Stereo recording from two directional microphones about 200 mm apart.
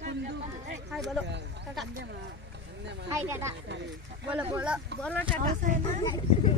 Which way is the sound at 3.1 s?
15° right (ahead or behind).